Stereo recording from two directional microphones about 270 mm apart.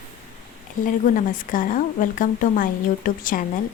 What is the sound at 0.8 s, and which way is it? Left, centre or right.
A woman's voice, left.